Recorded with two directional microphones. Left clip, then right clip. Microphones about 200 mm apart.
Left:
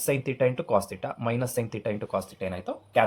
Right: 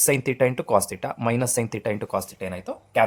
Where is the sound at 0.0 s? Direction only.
35° right (ahead or behind).